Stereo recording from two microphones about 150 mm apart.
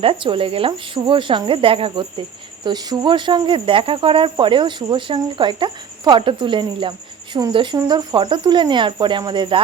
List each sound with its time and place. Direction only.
0.0 s speech: 35° right (ahead or behind)